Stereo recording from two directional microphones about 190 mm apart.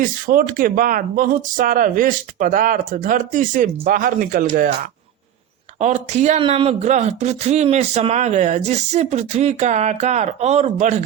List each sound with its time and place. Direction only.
0.0 s speech: 45° right (ahead or behind)